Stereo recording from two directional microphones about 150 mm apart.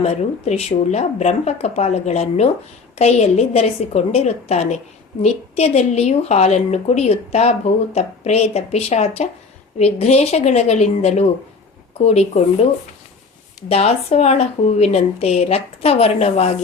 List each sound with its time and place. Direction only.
0.0 s a woman's voice: 45° left (ahead or behind)